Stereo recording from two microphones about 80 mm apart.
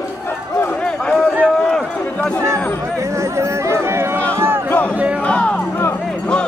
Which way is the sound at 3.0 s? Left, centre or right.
Right.